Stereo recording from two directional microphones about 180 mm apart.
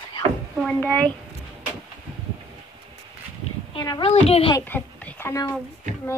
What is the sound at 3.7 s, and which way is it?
Speech, 25° left (ahead or behind).